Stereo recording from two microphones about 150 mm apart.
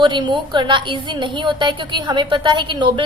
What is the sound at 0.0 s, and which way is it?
A woman's voice, 30° right (ahead or behind).